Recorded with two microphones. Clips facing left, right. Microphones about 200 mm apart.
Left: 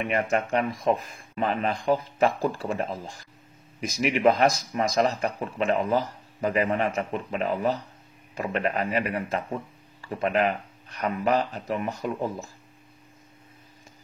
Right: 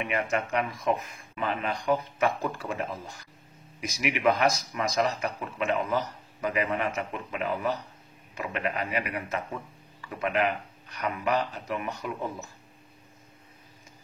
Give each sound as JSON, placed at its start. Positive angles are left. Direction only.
{"t": 0.1, "sound": "speech", "side_deg": 35}